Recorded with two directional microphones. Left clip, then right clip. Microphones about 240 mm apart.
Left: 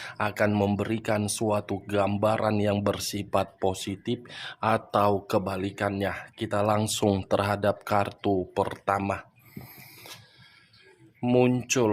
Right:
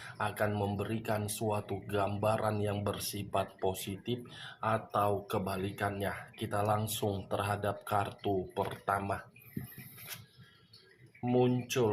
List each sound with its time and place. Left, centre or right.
0.0 s speech: left
11.2 s speech: left